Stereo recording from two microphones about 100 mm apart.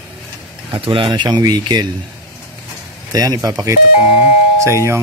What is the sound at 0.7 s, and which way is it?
Speech, 60° right (ahead or behind).